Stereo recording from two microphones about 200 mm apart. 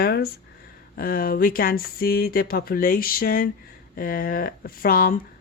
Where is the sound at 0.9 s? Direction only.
45° left (ahead or behind).